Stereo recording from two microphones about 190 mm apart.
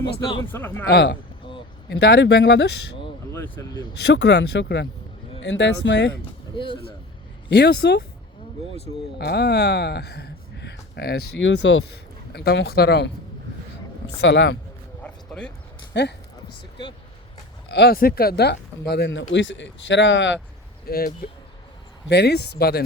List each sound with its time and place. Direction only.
0.5 s a man's voice: 10° left (ahead or behind)
0.9 s speech: 60° left (ahead or behind)
3.3 s speech: 15° left (ahead or behind)
4.0 s speech: 65° left (ahead or behind)
6.5 s speech: 25° left (ahead or behind)
7.5 s speech: 60° left (ahead or behind)
14.2 s speech: 65° left (ahead or behind)
15.0 s a sound: 5° left (ahead or behind)
15.9 s speech: 65° left (ahead or behind)
17.7 s speech: 55° left (ahead or behind)
19.3 s speech: 75° left (ahead or behind)
20.8 s speech: 50° left (ahead or behind)